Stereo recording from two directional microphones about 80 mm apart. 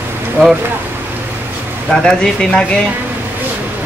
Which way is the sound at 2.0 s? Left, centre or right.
Centre.